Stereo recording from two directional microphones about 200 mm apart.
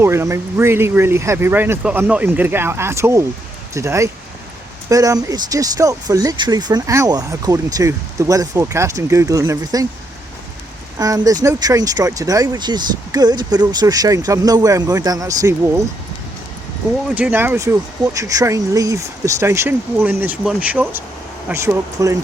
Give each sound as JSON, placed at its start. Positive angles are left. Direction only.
{"t": 0.0, "sound": "speech", "side_deg": -15}
{"t": 10.9, "sound": "speech", "side_deg": -15}
{"t": 17.1, "sound": "speech", "side_deg": -5}